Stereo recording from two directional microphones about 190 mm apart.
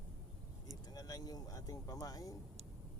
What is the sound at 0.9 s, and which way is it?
Speech, 20° left (ahead or behind).